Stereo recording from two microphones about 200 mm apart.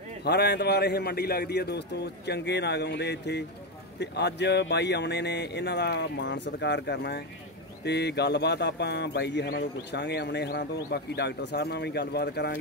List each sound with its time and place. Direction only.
0.2 s speech: 55° left (ahead or behind)